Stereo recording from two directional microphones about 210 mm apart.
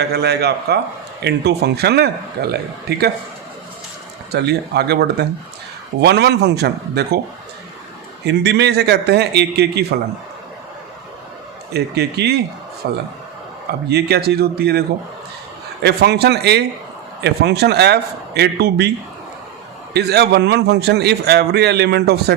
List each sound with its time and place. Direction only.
0.0 s a man's voice: 50° right (ahead or behind)
4.3 s a man's voice: 50° right (ahead or behind)
8.2 s a man's voice: 55° right (ahead or behind)
11.7 s a man's voice: 50° right (ahead or behind)
19.9 s a man's voice: 50° right (ahead or behind)